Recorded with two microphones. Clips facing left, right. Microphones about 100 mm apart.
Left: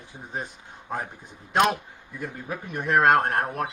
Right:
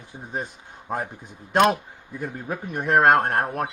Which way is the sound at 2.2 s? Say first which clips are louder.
Right 3 dB; 40° right (ahead or behind).